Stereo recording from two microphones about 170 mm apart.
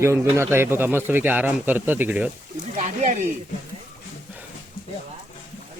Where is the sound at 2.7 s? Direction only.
45° right (ahead or behind).